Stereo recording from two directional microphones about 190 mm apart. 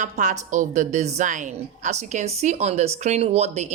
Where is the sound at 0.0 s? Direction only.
40° right (ahead or behind).